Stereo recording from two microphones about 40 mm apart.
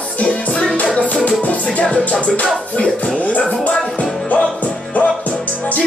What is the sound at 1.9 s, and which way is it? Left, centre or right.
Speech, left.